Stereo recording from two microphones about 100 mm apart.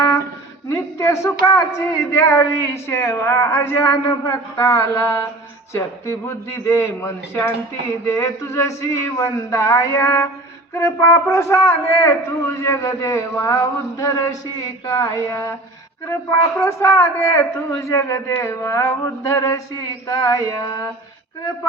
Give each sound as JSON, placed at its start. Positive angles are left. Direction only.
{"t": 0.7, "sound": "a man's voice", "side_deg": 30}
{"t": 16.6, "sound": "a man's voice", "side_deg": 30}